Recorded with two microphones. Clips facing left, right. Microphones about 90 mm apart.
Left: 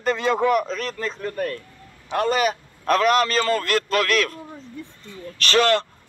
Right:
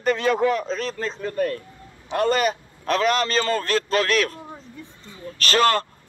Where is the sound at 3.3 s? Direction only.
35° right (ahead or behind).